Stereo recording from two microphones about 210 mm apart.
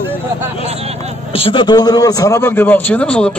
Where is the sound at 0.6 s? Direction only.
30° right (ahead or behind).